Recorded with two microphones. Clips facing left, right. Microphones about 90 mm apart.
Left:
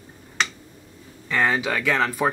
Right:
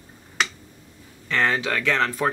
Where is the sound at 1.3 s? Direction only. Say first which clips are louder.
Left 1 dB; 10° left (ahead or behind).